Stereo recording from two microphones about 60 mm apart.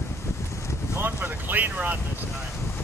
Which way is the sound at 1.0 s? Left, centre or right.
Right.